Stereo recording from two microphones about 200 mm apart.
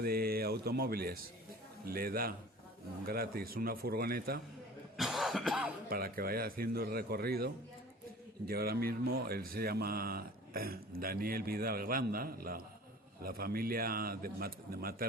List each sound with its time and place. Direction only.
0.0 s speech: 50° right (ahead or behind)
4.9 s cough: centre (ahead or behind)
5.9 s speech: 50° right (ahead or behind)